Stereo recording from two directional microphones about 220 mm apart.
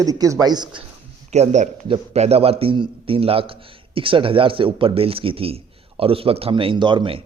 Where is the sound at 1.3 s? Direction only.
30° right (ahead or behind).